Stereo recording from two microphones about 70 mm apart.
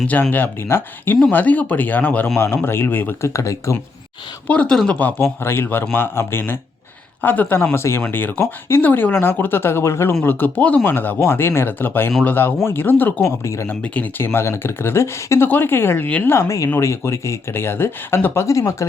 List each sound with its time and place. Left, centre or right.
0.1 s a man's voice: left
2.6 s speech: left
3.2 s speech: left
4.4 s a man's voice: centre; by 10.2 s left
10.2 s a man's voice: left
13.2 s speech: left
13.7 s a man's voice: left
14.2 s speech: left
16.0 s a man's voice: centre
16.3 s speech: left